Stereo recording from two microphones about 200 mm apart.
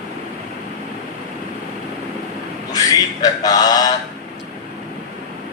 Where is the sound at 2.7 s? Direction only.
20° left (ahead or behind).